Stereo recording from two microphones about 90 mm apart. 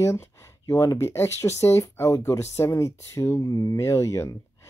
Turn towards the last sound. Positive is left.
turn(degrees=35)  # may be behind; listen again after turning